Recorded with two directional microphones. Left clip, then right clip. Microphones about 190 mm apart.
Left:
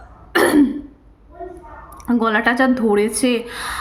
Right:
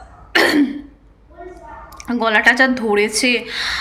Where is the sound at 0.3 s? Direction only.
40° left (ahead or behind).